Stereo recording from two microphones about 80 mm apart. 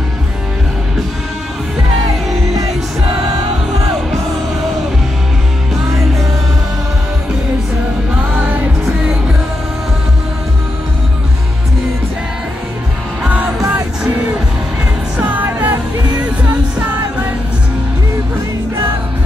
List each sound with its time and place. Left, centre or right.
13.6 s music: right
15.1 s music: right